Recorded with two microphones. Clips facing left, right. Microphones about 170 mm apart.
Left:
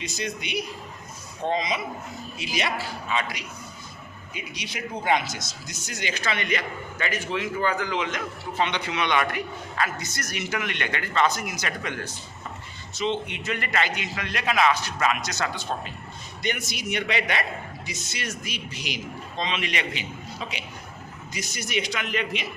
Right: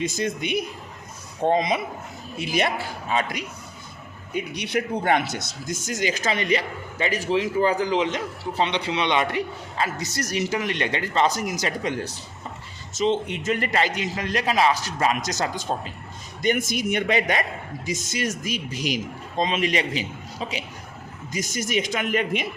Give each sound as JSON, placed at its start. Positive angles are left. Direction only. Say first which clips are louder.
{"t": 0.0, "sound": "a man's voice", "louder": "right 6 dB", "side_deg": -50}
{"t": 4.4, "sound": "a man's voice", "louder": "right 10 dB", "side_deg": -60}